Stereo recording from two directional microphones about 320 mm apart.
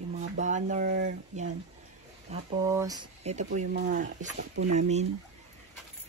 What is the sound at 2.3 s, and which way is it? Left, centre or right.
Speech, centre.